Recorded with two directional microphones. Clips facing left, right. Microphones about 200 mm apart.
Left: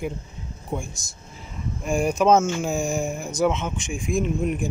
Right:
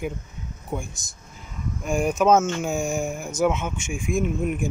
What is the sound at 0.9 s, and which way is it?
Speech, 20° right (ahead or behind).